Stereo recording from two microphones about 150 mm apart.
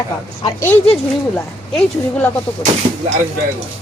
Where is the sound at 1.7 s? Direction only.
10° left (ahead or behind).